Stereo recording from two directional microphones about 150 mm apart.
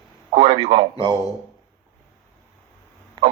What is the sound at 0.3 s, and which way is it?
Speech, 40° right (ahead or behind).